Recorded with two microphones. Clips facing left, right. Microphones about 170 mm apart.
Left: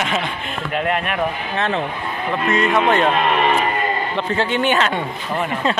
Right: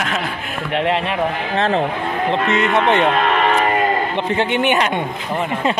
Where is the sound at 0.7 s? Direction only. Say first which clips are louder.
Right 3 dB; 25° right (ahead or behind).